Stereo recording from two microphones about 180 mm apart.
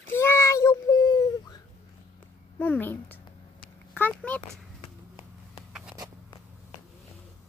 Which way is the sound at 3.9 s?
10° left (ahead or behind).